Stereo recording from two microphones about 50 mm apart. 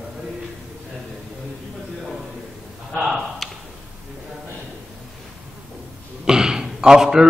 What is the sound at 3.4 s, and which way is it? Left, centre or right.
Tick-tock, centre.